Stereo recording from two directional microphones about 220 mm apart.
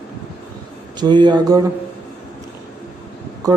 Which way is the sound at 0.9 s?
20° right (ahead or behind).